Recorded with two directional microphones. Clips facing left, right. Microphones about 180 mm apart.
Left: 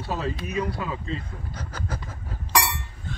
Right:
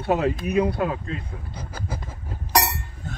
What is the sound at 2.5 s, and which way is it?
Chink, 45° right (ahead or behind).